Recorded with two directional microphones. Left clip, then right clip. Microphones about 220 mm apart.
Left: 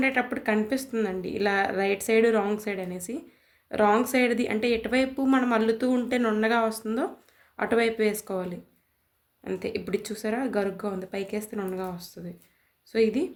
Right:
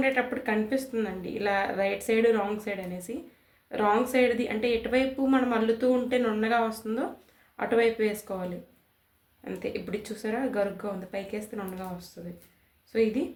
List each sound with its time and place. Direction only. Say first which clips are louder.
0.0 s speech: left 1 dB; 50° left (ahead or behind)